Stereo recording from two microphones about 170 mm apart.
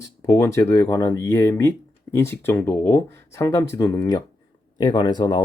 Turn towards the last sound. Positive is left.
turn(degrees=25)  # may be behind; listen again after turning